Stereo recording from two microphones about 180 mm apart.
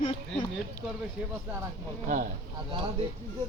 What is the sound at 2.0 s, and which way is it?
Speech, 45° right (ahead or behind).